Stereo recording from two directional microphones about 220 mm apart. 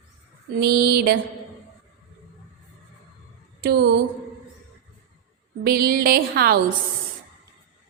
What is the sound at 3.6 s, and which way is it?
Speech, 45° right (ahead or behind).